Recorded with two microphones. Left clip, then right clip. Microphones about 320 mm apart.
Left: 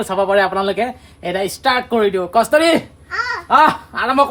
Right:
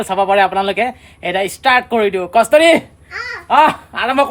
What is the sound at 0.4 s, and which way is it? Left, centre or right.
Speech, centre.